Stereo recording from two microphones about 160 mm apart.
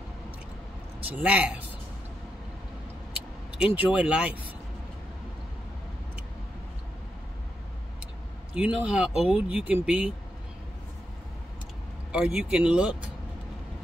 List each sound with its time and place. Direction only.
1.0 s speech: 10° right (ahead or behind)
3.6 s speech: 10° right (ahead or behind)
8.5 s speech: 5° right (ahead or behind)
12.1 s speech: 5° right (ahead or behind)